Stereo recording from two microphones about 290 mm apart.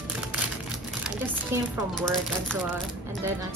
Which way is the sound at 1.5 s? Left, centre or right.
Centre.